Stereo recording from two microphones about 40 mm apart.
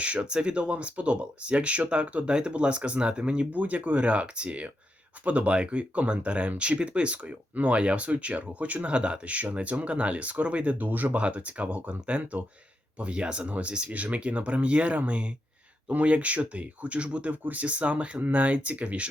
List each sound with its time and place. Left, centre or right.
0.0 s speech: right
3.5 s speech: right
9.0 s speech: right
10.8 s speech: right
11.2 s speech: right